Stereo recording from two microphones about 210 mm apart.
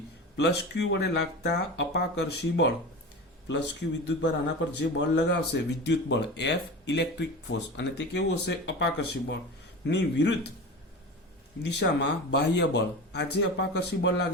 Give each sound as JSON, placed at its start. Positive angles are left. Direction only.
{"t": 0.3, "sound": "speech", "side_deg": 55}
{"t": 11.6, "sound": "speech", "side_deg": 55}